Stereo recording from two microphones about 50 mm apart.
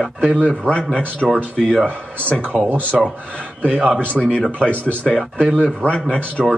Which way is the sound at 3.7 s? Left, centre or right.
Centre.